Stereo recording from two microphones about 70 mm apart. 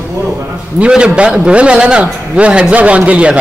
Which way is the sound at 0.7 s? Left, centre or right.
Centre.